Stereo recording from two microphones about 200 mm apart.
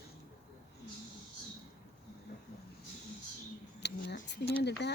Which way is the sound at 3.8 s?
60° left (ahead or behind).